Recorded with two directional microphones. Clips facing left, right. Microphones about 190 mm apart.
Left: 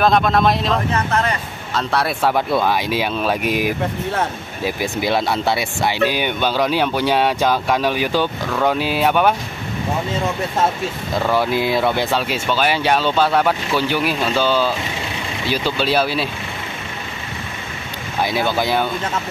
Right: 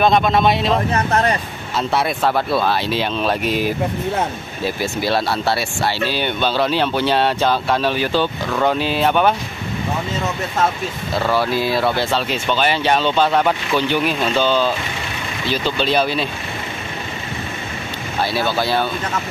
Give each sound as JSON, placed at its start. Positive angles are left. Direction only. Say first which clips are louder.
{"t": 0.0, "sound": "speech", "louder": "even", "side_deg": 0}
{"t": 0.9, "sound": "speech", "louder": "right 2 dB", "side_deg": -35}
{"t": 1.8, "sound": "speech", "louder": "right 1 dB", "side_deg": -5}
{"t": 2.2, "sound": "speech", "louder": "left 2 dB", "side_deg": 15}
{"t": 11.3, "sound": "speech", "louder": "left 1 dB", "side_deg": 20}
{"t": 18.2, "sound": "speech", "louder": "left 1 dB", "side_deg": 15}